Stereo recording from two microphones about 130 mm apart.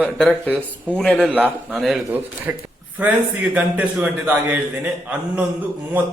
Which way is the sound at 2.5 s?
15° right (ahead or behind).